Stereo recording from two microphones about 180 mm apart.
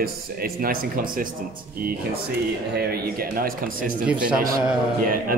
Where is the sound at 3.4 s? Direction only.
50° right (ahead or behind).